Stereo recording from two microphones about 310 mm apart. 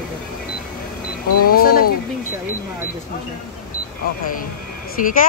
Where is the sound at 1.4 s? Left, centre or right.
Left.